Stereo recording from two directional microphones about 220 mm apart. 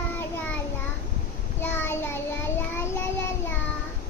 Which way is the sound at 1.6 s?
10° left (ahead or behind).